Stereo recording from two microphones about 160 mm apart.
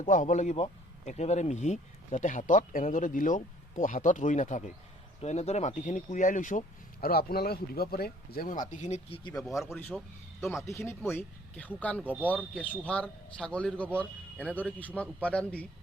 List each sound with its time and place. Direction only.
0.0 s speech: 55° left (ahead or behind); by 9.3 s 35° left (ahead or behind)
9.6 s speech: 10° left (ahead or behind)